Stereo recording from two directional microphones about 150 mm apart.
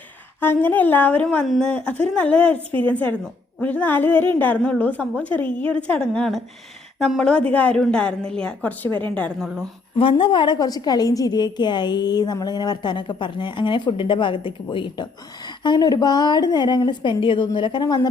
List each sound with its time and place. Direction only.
0.3 s a woman's voice: 10° left (ahead or behind)
10.0 s a woman's voice: 35° left (ahead or behind)